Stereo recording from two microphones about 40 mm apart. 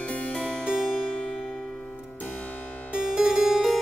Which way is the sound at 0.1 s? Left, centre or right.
Left.